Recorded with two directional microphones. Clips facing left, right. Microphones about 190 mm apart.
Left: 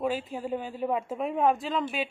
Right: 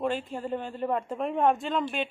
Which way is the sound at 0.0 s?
5° left (ahead or behind).